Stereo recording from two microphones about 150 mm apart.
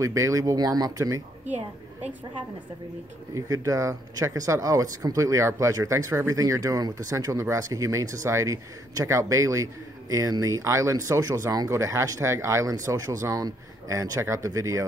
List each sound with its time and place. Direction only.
0.0 s speech: 20° right (ahead or behind)
3.3 s speech: 20° right (ahead or behind)